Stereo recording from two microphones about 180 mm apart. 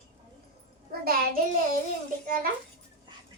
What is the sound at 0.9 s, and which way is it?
Speech, 55° right (ahead or behind).